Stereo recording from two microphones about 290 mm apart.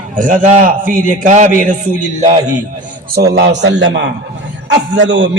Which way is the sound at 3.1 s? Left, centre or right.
Right.